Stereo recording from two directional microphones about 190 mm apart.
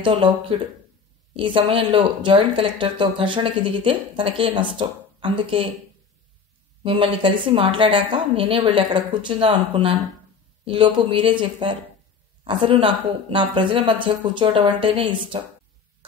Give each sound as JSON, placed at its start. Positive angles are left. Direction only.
{"t": 0.0, "sound": "speech", "side_deg": -25}
{"t": 6.8, "sound": "speech", "side_deg": -25}